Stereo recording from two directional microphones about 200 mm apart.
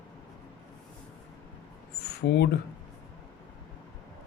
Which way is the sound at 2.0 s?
55° left (ahead or behind).